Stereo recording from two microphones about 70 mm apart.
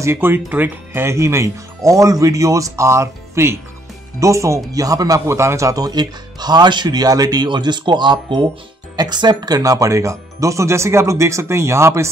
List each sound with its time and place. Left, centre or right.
0.0 s speech: right
4.7 s speech: right